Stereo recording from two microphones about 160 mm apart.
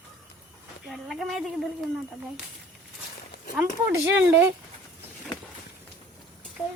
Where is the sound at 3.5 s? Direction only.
10° right (ahead or behind).